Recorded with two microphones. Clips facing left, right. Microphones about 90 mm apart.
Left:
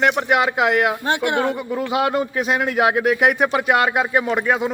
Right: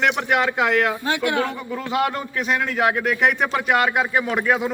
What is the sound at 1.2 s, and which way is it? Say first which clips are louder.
A man's voice: left 2 dB; 30° left (ahead or behind).